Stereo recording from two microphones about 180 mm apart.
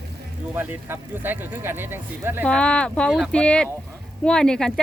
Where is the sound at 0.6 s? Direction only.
10° right (ahead or behind).